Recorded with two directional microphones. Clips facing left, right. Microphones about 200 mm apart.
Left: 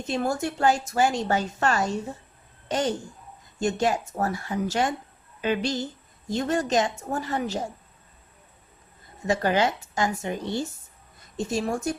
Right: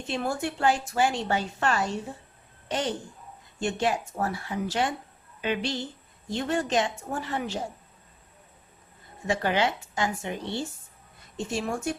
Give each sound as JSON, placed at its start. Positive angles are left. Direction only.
{"t": 0.0, "sound": "a woman's voice", "side_deg": 40}
{"t": 9.2, "sound": "a woman's voice", "side_deg": 40}